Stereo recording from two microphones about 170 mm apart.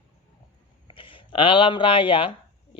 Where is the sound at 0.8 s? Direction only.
30° left (ahead or behind).